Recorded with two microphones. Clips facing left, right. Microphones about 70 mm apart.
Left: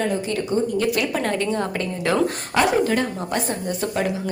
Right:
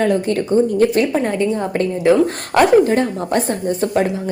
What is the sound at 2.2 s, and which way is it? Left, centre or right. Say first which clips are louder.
Speech: right 6 dB; right.